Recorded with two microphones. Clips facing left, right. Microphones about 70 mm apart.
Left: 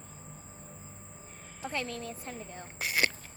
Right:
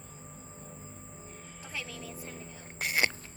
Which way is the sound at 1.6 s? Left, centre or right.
Left.